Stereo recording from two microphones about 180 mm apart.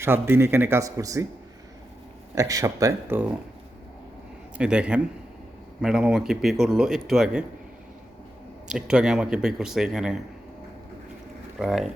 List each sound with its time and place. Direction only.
0.0 s a man's voice: 10° right (ahead or behind)
2.3 s a man's voice: 20° right (ahead or behind)
4.5 s a man's voice: 5° right (ahead or behind)
8.6 s a man's voice: 5° right (ahead or behind)
11.6 s a man's voice: centre (ahead or behind)